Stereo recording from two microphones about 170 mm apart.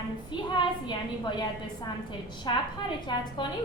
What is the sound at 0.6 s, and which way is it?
Speech, 25° left (ahead or behind).